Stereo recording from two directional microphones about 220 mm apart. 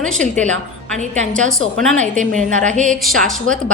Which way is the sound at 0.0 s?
5° left (ahead or behind).